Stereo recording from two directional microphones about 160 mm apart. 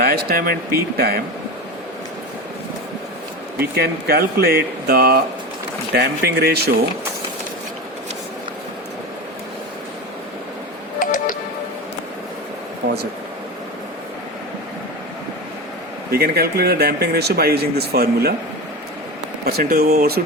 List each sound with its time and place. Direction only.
0.0 s speech: 70° right (ahead or behind)
3.6 s speech: 75° right (ahead or behind)
5.9 s speech: 90° right
11.0 s music: 60° left (ahead or behind)
12.8 s a sound: 70° right (ahead or behind)
16.1 s speech: 75° right (ahead or behind)
19.5 s speech: 70° right (ahead or behind)